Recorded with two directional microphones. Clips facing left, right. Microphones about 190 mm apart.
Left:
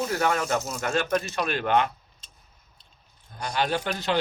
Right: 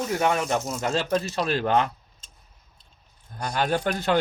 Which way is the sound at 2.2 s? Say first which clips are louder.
Right 1 dB; 45° right (ahead or behind).